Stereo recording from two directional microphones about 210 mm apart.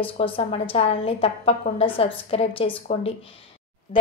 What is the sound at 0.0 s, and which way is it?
A woman's voice, 25° left (ahead or behind).